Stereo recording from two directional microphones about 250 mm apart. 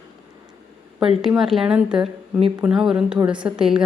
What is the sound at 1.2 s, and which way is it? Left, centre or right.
A woman's voice, centre.